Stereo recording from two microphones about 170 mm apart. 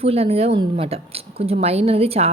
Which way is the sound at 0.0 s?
35° right (ahead or behind).